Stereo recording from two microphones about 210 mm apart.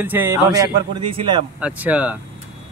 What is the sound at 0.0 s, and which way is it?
A man's voice, 10° right (ahead or behind).